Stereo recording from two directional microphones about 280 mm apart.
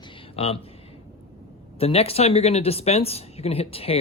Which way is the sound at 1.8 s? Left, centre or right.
Left.